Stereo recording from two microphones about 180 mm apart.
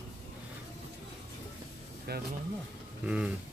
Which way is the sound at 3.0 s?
5° right (ahead or behind).